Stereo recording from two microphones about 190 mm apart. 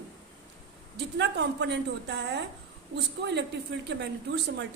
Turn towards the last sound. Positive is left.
turn(degrees=-65)  # may be behind; listen again after turning